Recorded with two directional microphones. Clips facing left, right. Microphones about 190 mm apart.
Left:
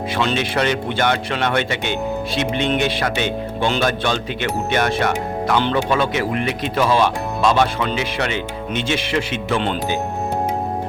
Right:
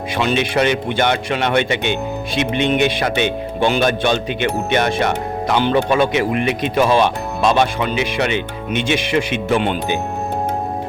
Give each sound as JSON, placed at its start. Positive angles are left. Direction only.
{"t": 0.2, "sound": "speech", "side_deg": -15}